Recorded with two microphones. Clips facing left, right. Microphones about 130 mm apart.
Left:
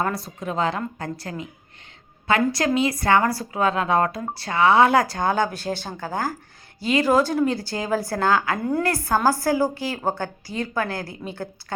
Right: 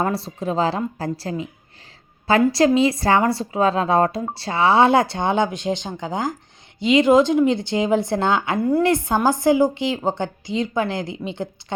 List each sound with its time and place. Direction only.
0.0 s a woman's voice: 30° right (ahead or behind)
2.5 s speech: 30° right (ahead or behind)